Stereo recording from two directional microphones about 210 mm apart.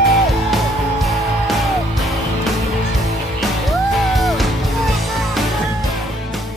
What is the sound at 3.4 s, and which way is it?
Music, centre (ahead or behind).